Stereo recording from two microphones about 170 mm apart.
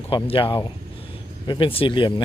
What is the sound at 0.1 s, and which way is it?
Speech, 30° left (ahead or behind).